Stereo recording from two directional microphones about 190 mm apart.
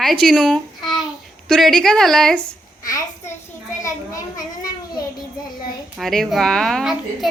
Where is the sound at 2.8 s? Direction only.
20° left (ahead or behind).